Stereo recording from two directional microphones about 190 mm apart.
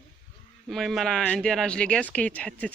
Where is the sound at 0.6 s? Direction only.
Centre (ahead or behind).